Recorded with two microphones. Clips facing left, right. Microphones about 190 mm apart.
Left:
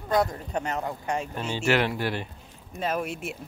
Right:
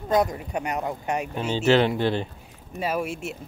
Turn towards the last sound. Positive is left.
turn(degrees=-5)  # may be behind; listen again after turning